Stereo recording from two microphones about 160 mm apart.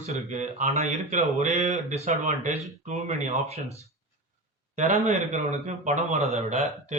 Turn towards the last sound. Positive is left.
turn(degrees=-45)  # may be behind; listen again after turning